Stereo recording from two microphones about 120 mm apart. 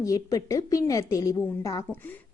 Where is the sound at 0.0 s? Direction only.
25° left (ahead or behind).